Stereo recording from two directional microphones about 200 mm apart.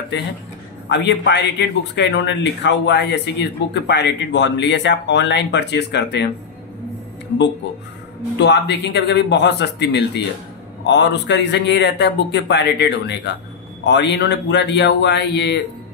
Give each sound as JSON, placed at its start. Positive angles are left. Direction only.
{"t": 0.8, "sound": "a man's voice", "side_deg": 60}
{"t": 8.4, "sound": "a man's voice", "side_deg": 60}